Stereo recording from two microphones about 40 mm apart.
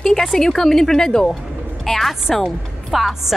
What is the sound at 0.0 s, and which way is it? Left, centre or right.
A woman's voice, centre.